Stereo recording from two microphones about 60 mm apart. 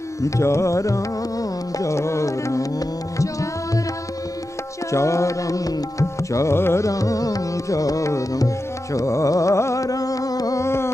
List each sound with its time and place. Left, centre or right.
0.2 s tabla: left
4.9 s tabla: left
6.5 s carnatic music: left
6.9 s music: left
8.9 s carnatic music: left
9.8 s music: left
10.6 s a sound: left